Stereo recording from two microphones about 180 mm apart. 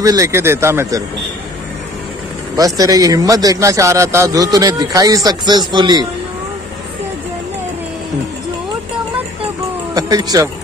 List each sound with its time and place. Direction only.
0.0 s speech: 15° right (ahead or behind)
2.5 s a man's voice: 20° right (ahead or behind)
9.9 s a man's voice: 20° right (ahead or behind)